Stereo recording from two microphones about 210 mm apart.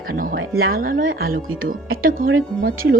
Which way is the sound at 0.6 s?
45° right (ahead or behind).